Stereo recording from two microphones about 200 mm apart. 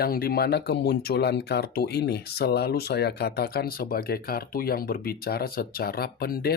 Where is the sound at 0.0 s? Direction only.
50° left (ahead or behind).